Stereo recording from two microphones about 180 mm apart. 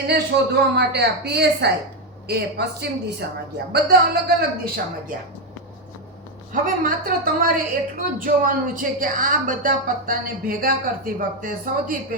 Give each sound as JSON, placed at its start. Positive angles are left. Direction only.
{"t": 0.1, "sound": "a woman's voice", "side_deg": -65}
{"t": 6.5, "sound": "a woman's voice", "side_deg": -50}